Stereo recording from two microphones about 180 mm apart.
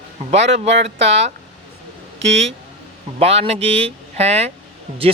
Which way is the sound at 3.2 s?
35° right (ahead or behind).